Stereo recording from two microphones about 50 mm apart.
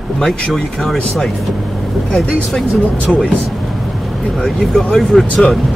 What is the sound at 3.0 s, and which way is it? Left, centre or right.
Speech, left.